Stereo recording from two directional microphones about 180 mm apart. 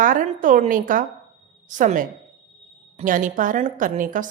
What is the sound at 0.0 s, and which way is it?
A woman's voice, 45° right (ahead or behind).